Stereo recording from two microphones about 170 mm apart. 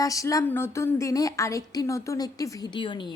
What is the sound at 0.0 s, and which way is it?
A woman's voice, 20° left (ahead or behind).